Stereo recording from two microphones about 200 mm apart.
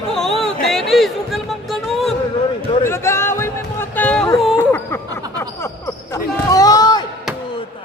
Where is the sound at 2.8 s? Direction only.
15° left (ahead or behind).